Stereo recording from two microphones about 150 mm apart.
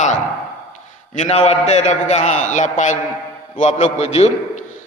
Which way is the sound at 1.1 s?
50° left (ahead or behind).